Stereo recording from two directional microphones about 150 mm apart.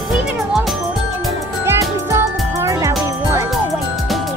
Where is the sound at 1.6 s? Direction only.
15° right (ahead or behind).